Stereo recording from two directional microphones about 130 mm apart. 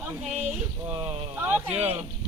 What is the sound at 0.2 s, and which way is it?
Speech, 5° right (ahead or behind).